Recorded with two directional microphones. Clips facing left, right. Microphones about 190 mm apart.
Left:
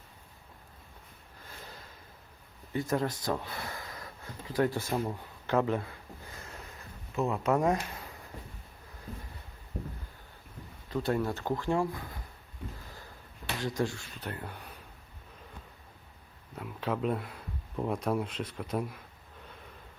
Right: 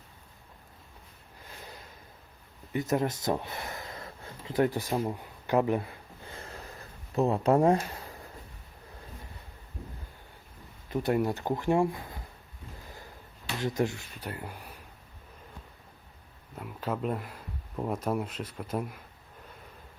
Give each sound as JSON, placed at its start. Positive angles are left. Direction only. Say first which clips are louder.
{"t": 2.7, "sound": "speech", "louder": "right 2 dB", "side_deg": -20}
{"t": 6.3, "sound": "a sound", "louder": "right 7 dB", "side_deg": -30}
{"t": 10.8, "sound": "speech", "louder": "right 3 dB", "side_deg": -20}
{"t": 13.6, "sound": "speech", "louder": "right 3 dB", "side_deg": -20}
{"t": 14.3, "sound": "speech", "louder": "right 1 dB", "side_deg": -5}
{"t": 16.6, "sound": "speech", "louder": "even", "side_deg": 0}